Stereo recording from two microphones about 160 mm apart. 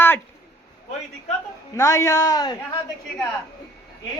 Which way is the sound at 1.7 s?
20° left (ahead or behind).